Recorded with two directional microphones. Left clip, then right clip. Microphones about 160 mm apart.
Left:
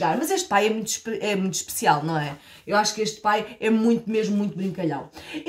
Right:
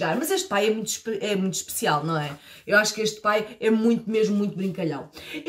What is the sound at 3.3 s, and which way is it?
Speech, 25° left (ahead or behind).